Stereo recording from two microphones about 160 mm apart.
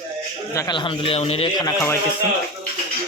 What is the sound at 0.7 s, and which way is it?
Speech, 30° left (ahead or behind).